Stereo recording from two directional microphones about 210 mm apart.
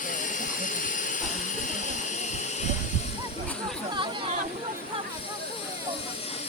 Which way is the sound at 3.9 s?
25° right (ahead or behind).